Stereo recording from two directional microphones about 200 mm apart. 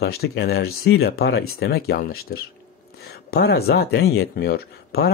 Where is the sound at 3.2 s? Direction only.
55° left (ahead or behind).